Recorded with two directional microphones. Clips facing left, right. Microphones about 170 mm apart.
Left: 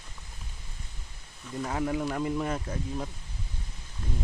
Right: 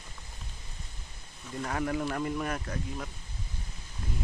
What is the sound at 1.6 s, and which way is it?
Speech, 15° left (ahead or behind).